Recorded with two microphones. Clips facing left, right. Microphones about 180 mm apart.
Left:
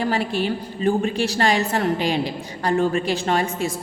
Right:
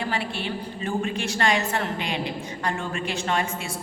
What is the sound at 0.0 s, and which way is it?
A woman's voice, 40° left (ahead or behind).